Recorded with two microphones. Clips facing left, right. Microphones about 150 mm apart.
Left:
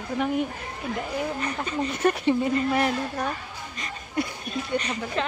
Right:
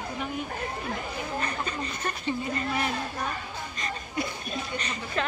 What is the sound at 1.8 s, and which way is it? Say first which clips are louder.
Speech: left 9 dB; 75° left (ahead or behind).